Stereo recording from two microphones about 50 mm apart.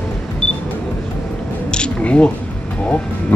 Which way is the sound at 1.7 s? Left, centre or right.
Left.